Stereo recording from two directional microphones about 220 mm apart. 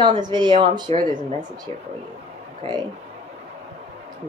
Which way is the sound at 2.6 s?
20° right (ahead or behind).